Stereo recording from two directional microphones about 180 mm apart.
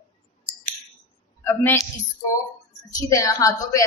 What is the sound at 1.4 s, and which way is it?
Speech, 15° left (ahead or behind).